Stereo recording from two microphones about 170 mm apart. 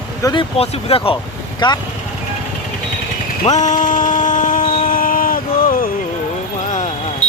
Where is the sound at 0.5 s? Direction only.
35° left (ahead or behind).